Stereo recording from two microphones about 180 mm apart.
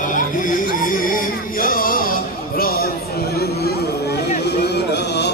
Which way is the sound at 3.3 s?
60° left (ahead or behind).